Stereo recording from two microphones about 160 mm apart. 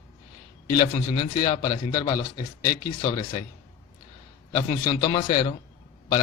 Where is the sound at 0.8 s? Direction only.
40° left (ahead or behind).